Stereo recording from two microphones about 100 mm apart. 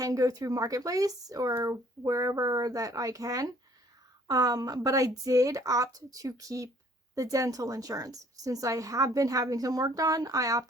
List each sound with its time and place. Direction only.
0.0 s a woman's voice: 35° right (ahead or behind)